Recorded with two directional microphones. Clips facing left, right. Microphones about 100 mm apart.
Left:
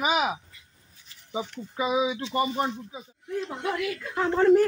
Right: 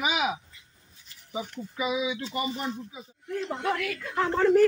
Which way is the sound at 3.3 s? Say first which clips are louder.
Right 1 dB; 15° left (ahead or behind).